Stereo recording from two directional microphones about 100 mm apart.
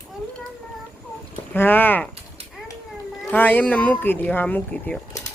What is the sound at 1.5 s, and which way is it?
Speech, 20° left (ahead or behind).